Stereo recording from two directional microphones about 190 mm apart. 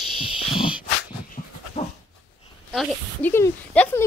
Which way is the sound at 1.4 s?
45° left (ahead or behind).